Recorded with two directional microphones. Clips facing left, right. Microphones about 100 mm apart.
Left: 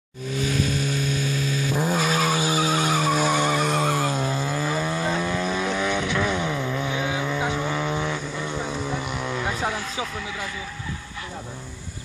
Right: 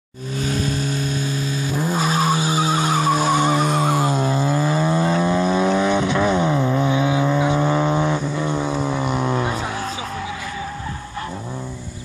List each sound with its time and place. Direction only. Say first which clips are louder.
0.5 s vehicle: right 3 dB; 35° right (ahead or behind)